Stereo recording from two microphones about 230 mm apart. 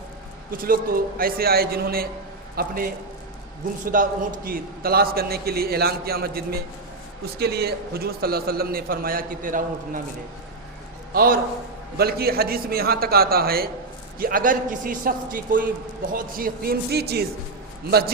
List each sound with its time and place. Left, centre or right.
0.5 s a man's voice: right
11.1 s a man's voice: right